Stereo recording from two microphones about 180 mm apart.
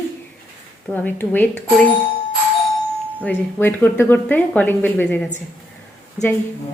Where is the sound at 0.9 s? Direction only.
10° left (ahead or behind).